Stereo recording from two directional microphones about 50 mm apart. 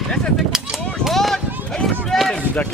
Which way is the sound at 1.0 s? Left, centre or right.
Centre.